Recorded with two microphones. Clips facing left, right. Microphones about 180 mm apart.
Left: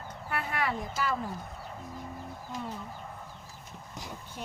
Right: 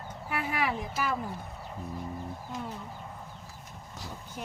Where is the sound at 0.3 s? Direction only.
5° right (ahead or behind).